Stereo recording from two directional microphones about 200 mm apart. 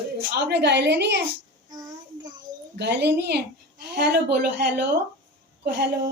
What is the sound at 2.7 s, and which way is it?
A woman's voice, 55° right (ahead or behind).